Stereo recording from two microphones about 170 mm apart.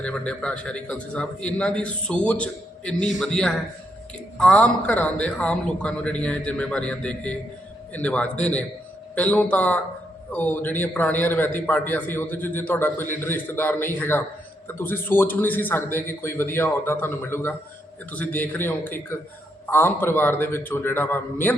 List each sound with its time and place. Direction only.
0.0 s a man's voice: 5° left (ahead or behind)